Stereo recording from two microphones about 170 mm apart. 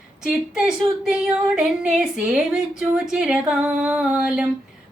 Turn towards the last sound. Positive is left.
turn(degrees=-5)  # may be behind; listen again after turning